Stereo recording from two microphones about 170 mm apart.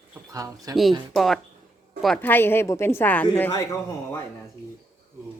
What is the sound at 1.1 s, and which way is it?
A woman's voice, centre (ahead or behind).